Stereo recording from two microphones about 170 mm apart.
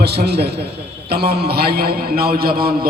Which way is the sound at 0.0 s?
75° right (ahead or behind).